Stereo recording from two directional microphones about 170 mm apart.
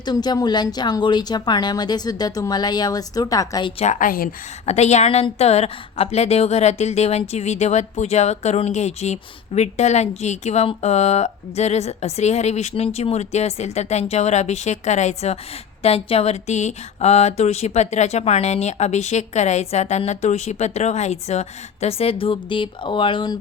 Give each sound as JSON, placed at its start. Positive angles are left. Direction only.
{"t": 0.0, "sound": "speech", "side_deg": 25}
{"t": 3.8, "sound": "a woman's voice", "side_deg": 45}
{"t": 4.6, "sound": "a woman's voice", "side_deg": 40}